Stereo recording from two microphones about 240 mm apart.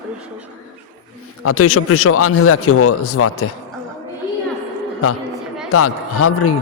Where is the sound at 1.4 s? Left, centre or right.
Left.